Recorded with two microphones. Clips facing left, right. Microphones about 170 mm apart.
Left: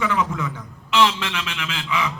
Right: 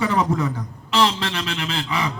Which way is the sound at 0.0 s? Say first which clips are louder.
Right 3 dB; 35° right (ahead or behind).